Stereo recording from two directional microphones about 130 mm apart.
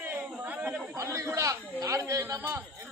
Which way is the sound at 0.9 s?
25° right (ahead or behind).